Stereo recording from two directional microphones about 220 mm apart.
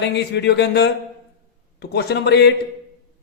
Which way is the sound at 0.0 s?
50° left (ahead or behind).